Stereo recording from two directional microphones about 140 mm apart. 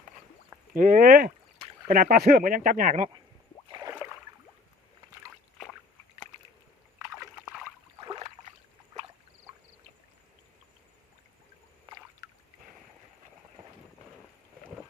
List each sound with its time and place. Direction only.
0.7 s speech: 85° right; by 3.1 s 65° right (ahead or behind)
3.7 s rowboat: 30° right (ahead or behind)
8.0 s a sound: 30° right (ahead or behind)
12.2 s rowboat: 25° right (ahead or behind)